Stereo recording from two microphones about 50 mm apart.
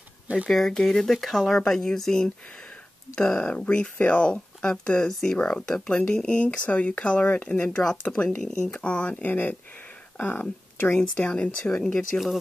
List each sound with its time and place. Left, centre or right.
0.5 s speech: centre
8.7 s speech: left
9.2 s speech: left
11.1 s speech: left